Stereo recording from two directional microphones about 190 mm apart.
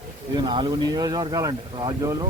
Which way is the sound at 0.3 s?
25° right (ahead or behind).